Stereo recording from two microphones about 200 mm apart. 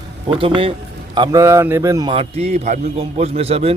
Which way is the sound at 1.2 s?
15° right (ahead or behind).